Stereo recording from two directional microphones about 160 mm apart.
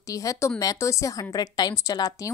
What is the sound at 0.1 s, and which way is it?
A woman's voice, 20° left (ahead or behind).